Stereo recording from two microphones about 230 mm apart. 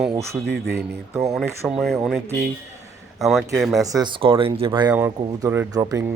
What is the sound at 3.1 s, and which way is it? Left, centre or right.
Speech, centre.